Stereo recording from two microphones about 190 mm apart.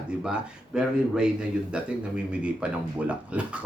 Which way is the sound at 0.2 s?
5° right (ahead or behind).